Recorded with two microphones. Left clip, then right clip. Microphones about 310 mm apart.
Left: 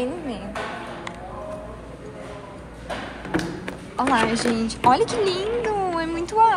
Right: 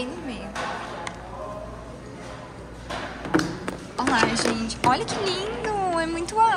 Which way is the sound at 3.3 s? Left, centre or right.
Right.